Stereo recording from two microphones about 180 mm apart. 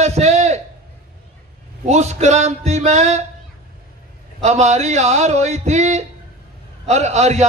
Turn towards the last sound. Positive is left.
turn(degrees=-40)  # may be behind; listen again after turning